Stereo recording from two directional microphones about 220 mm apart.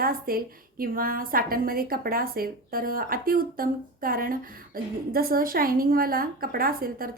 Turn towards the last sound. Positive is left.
turn(degrees=-40)  # may be behind; listen again after turning